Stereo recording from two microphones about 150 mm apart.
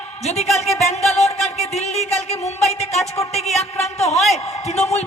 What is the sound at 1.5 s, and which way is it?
Speech, 45° left (ahead or behind).